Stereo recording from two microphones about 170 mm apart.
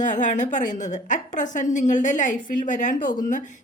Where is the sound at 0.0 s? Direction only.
50° left (ahead or behind).